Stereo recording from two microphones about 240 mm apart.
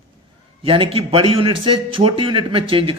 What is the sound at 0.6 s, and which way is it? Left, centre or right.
A man's voice, right.